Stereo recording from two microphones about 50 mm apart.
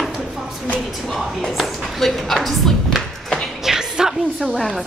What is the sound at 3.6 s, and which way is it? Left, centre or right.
Music, centre.